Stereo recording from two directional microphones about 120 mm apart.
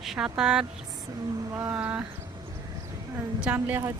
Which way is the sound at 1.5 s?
25° right (ahead or behind).